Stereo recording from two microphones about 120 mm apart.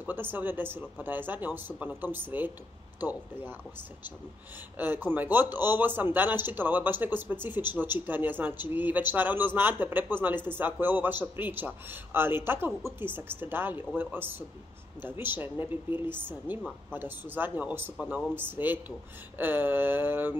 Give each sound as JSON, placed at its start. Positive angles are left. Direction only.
{"t": 0.0, "sound": "speech", "side_deg": -15}
{"t": 4.7, "sound": "speech", "side_deg": -15}